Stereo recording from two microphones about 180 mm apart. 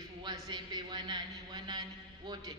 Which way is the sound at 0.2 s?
25° right (ahead or behind).